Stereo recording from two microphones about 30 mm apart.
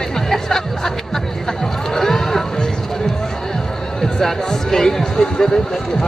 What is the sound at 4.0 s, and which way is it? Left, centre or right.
Speech, centre.